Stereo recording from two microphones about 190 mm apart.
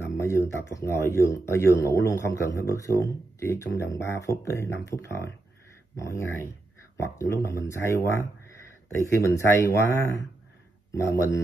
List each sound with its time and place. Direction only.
0.1 s speech: 15° left (ahead or behind)